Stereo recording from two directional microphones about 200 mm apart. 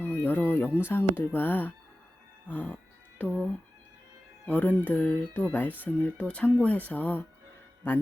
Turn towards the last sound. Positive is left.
turn(degrees=10)  # may be behind; listen again after turning